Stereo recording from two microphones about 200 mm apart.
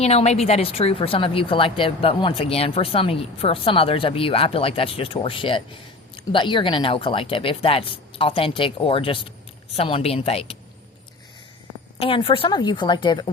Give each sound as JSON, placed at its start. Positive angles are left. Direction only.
{"t": 0.0, "sound": "speech", "side_deg": 30}
{"t": 11.9, "sound": "speech", "side_deg": 25}